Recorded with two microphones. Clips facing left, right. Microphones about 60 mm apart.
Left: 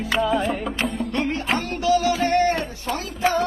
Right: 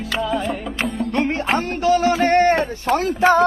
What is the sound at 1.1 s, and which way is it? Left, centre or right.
Speech, right.